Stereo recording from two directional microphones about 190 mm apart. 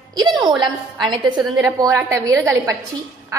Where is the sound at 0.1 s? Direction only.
20° right (ahead or behind).